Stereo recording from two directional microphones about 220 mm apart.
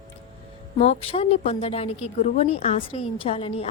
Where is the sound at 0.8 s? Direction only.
30° left (ahead or behind).